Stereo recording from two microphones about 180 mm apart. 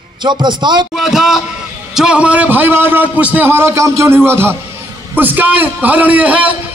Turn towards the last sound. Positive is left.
turn(degrees=-10)  # may be behind; listen again after turning